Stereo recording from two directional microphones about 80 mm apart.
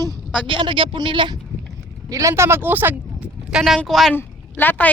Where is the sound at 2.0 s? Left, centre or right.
Right.